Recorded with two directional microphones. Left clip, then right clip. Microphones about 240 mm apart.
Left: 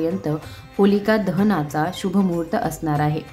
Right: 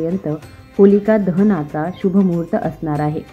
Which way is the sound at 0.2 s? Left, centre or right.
Centre.